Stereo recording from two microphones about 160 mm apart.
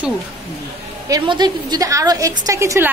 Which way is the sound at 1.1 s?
25° right (ahead or behind).